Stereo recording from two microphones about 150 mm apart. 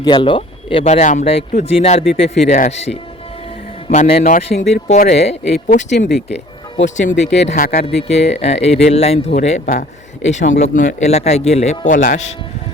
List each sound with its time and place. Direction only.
0.0 s speech: 30° left (ahead or behind)
0.9 s speech: 50° left (ahead or behind)
4.3 s speech: 60° left (ahead or behind); by 5.4 s 45° left (ahead or behind)
5.5 s speech: 60° left (ahead or behind)
7.9 s speech: 45° left (ahead or behind)